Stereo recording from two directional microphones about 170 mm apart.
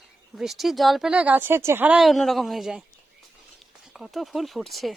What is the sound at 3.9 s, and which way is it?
Speech, centre (ahead or behind).